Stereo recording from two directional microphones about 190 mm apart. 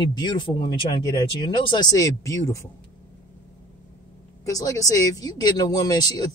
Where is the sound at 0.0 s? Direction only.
25° left (ahead or behind).